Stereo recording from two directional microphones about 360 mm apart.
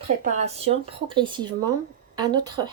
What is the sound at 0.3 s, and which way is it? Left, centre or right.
Speech, centre.